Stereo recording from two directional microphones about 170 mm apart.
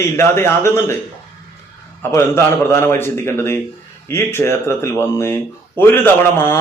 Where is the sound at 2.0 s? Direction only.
15° left (ahead or behind).